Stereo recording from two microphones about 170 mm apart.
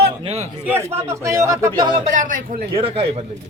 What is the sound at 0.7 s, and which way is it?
A man's voice, 15° right (ahead or behind).